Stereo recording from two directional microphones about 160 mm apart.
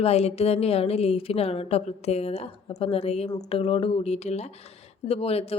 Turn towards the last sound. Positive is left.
turn(degrees=40)  # may be behind; listen again after turning